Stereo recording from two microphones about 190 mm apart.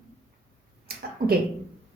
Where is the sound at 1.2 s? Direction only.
50° right (ahead or behind).